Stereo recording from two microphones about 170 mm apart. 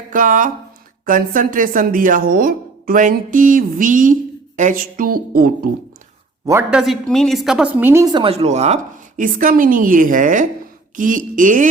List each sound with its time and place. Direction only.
0.1 s speech: 50° right (ahead or behind)
6.4 s speech: 15° right (ahead or behind)
6.7 s a woman's voice: 5° right (ahead or behind)
8.1 s speech: 35° right (ahead or behind); by 11.7 s 50° right (ahead or behind)